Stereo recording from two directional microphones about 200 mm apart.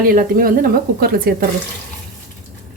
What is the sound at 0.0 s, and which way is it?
A woman's voice, 45° right (ahead or behind).